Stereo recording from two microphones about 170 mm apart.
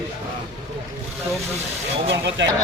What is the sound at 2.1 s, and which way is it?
Speech, 90° right.